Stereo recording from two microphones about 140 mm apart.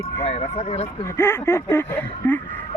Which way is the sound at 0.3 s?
45° left (ahead or behind).